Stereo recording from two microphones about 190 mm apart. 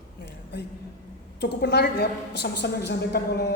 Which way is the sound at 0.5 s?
65° left (ahead or behind).